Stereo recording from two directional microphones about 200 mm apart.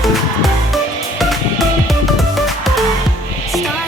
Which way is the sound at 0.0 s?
Centre (ahead or behind).